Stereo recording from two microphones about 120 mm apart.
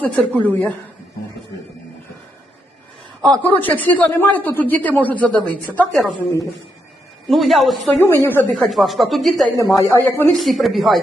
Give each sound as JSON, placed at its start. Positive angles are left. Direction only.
{"t": 0.0, "sound": "speech", "side_deg": 10}
{"t": 3.2, "sound": "speech", "side_deg": 10}
{"t": 5.9, "sound": "speech", "side_deg": 0}
{"t": 7.3, "sound": "speech", "side_deg": 0}
{"t": 8.0, "sound": "speech", "side_deg": 20}
{"t": 8.5, "sound": "speech", "side_deg": 0}
{"t": 9.6, "sound": "speech", "side_deg": 25}
{"t": 10.3, "sound": "speech", "side_deg": 0}